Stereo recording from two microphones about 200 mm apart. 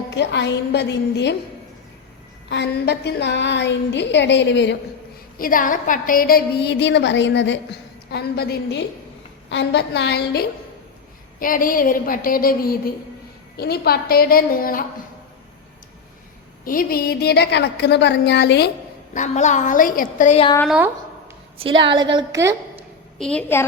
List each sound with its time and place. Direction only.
0.1 s a woman's voice: 60° left (ahead or behind)
2.5 s a woman's voice: 60° left (ahead or behind)
5.4 s a woman's voice: 45° left (ahead or behind); by 7.6 s 65° left (ahead or behind)
8.1 s a woman's voice: 50° left (ahead or behind)
11.3 s a woman's voice: 45° left (ahead or behind)
16.6 s a woman's voice: 45° left (ahead or behind)
19.1 s a woman's voice: 35° left (ahead or behind)
20.7 s speech: 5° right (ahead or behind)
21.6 s a woman's voice: 25° right (ahead or behind)
23.1 s a woman's voice: 5° left (ahead or behind)